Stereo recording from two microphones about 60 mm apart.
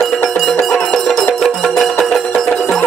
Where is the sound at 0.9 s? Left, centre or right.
Centre.